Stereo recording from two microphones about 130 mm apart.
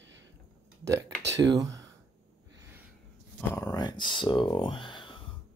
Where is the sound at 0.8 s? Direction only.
25° right (ahead or behind).